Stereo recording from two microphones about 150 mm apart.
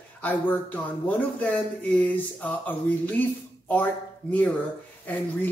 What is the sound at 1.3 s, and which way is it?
Speech, 10° left (ahead or behind).